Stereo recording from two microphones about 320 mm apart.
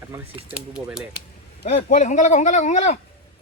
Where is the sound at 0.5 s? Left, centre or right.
Centre.